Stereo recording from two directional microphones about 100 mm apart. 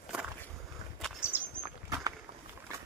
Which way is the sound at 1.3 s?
20° right (ahead or behind).